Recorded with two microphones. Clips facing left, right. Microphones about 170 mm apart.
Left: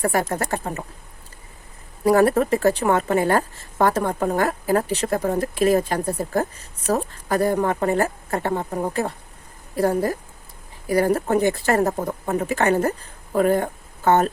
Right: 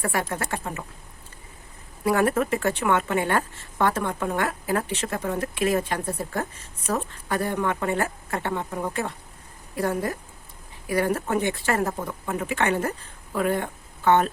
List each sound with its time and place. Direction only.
0.0 s a woman's voice: 40° left (ahead or behind)
2.0 s a woman's voice: 35° left (ahead or behind)